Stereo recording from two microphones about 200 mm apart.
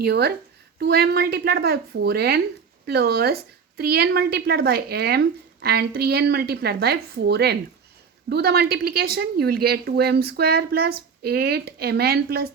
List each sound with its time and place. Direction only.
0.0 s a woman's voice: 55° right (ahead or behind)